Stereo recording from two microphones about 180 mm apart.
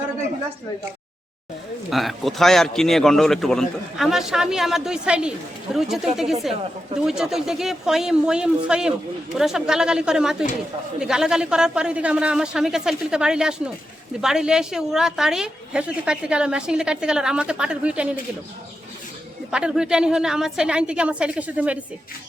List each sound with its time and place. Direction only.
1.9 s a woman's voice: centre (ahead or behind)
19.5 s a woman's voice: 5° right (ahead or behind)